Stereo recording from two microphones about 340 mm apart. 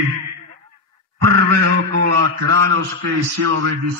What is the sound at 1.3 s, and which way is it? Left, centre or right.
A man's voice, right.